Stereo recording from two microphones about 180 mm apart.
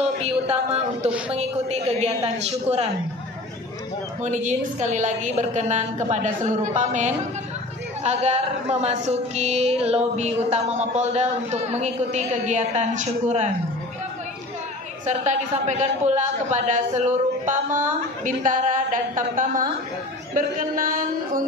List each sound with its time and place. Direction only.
1.3 s a woman's voice: 35° right (ahead or behind)
4.2 s a woman's voice: 40° right (ahead or behind)
15.0 s a woman's voice: 40° right (ahead or behind)